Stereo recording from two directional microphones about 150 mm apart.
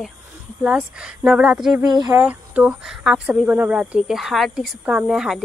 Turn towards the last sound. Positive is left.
turn(degrees=-5)  # may be behind; listen again after turning